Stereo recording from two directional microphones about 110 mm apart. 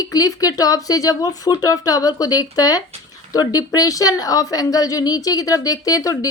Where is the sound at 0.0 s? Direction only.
35° left (ahead or behind).